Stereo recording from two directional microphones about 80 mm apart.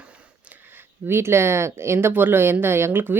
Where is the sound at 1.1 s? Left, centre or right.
Right.